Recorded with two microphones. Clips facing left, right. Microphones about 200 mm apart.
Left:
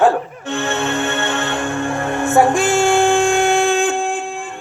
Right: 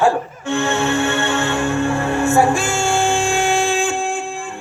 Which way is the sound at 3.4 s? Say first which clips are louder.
Left 3 dB; 60° left (ahead or behind).